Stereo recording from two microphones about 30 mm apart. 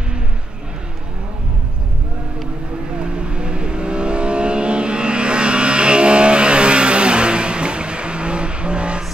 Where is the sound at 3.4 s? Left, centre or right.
Right.